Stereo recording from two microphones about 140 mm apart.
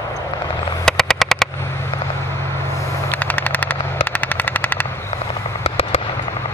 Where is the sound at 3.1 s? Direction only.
10° left (ahead or behind).